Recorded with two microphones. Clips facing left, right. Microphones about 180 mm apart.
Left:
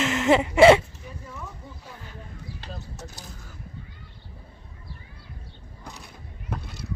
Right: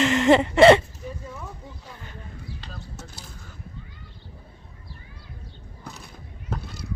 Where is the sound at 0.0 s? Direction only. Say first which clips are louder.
Right 3 dB; 5° left (ahead or behind).